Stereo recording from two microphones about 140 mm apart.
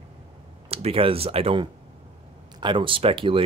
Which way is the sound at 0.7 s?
45° right (ahead or behind).